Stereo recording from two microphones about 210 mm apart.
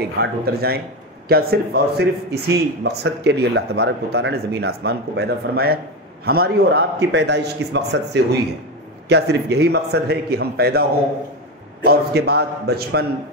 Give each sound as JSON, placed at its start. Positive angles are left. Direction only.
{"t": 0.2, "sound": "a man's voice", "side_deg": -50}
{"t": 11.8, "sound": "a man's voice", "side_deg": -50}